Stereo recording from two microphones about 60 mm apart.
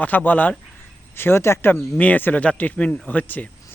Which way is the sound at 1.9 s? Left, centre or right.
Left.